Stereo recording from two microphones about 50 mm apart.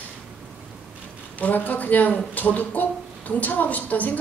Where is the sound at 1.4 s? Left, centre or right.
Left.